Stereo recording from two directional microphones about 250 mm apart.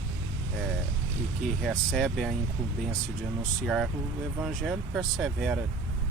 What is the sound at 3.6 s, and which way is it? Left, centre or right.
Speech, centre.